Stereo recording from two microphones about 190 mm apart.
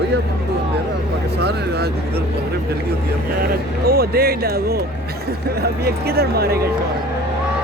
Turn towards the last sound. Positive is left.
turn(degrees=-55)  # may be behind; listen again after turning